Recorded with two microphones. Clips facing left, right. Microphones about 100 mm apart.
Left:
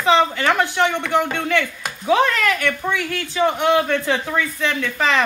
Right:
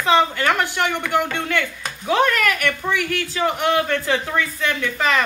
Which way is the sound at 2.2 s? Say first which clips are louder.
Even; 20° left (ahead or behind).